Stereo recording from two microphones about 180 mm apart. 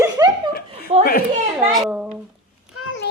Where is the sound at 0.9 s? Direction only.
40° right (ahead or behind).